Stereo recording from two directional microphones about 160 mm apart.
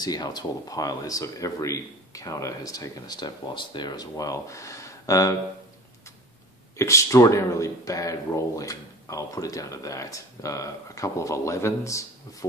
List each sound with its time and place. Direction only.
0.0 s speech: 25° left (ahead or behind)
6.8 s speech: 20° left (ahead or behind)